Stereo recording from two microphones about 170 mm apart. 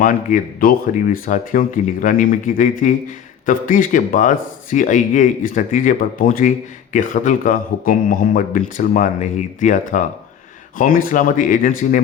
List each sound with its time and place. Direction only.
0.0 s speech: 55° left (ahead or behind)